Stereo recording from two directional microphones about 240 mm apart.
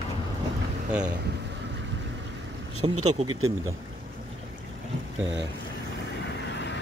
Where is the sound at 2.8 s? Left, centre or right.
Right.